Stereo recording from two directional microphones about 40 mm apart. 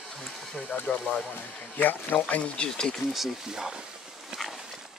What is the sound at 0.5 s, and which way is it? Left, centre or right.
Speech, left.